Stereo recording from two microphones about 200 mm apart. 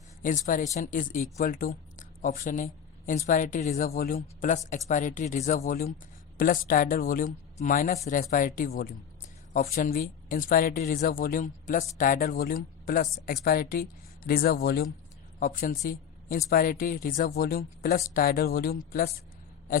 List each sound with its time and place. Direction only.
0.2 s a woman's voice: 40° left (ahead or behind)